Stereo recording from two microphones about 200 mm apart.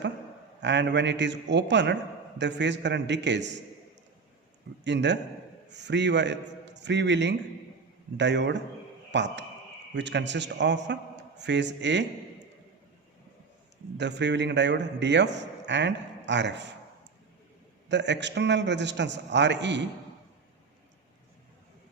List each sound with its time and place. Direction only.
0.6 s a man's voice: 60° right (ahead or behind)
4.8 s a man's voice: 60° right (ahead or behind)
14.0 s a man's voice: 60° right (ahead or behind)
17.8 s a man's voice: 60° right (ahead or behind)